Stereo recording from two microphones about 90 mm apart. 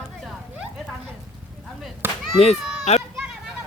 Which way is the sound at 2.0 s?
25° right (ahead or behind).